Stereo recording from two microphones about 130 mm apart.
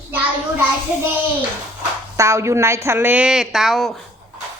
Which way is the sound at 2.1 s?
20° right (ahead or behind).